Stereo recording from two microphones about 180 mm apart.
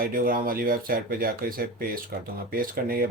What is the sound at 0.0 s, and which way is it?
Speech, 55° right (ahead or behind).